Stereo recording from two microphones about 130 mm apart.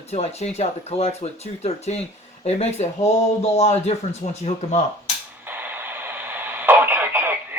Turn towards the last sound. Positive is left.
turn(degrees=-15)  # may be behind; listen again after turning